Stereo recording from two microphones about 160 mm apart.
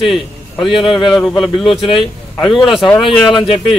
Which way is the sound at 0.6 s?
30° left (ahead or behind).